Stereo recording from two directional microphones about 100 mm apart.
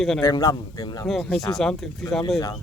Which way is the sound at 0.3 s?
35° left (ahead or behind).